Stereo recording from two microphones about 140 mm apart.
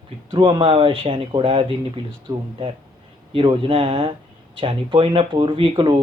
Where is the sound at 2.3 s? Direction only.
25° right (ahead or behind).